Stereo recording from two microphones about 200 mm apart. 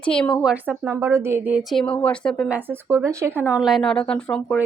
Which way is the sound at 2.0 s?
5° left (ahead or behind).